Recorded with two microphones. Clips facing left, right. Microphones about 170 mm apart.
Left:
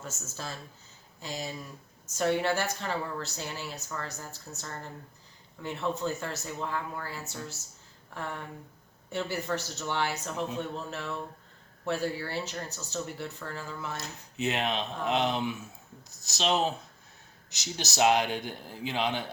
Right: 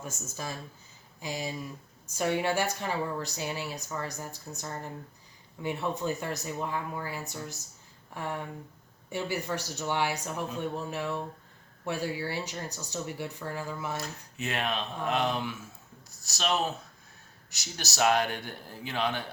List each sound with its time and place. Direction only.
0.0 s a woman's voice: 15° right (ahead or behind)
14.3 s a man's voice: 20° left (ahead or behind)